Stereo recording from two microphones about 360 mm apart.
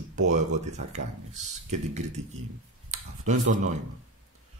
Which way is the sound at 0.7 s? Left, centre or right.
Centre.